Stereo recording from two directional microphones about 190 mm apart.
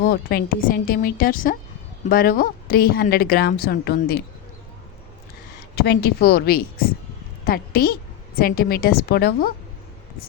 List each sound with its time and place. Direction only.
0.0 s speech: 55° left (ahead or behind)
5.7 s a woman's voice: 55° left (ahead or behind)